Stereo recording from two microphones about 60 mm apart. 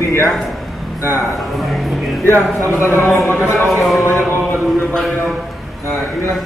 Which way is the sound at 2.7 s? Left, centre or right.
Left.